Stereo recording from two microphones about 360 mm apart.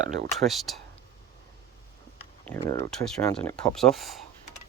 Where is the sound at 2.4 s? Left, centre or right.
Centre.